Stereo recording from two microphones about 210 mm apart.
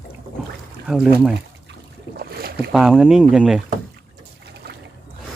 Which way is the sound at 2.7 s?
Centre (ahead or behind).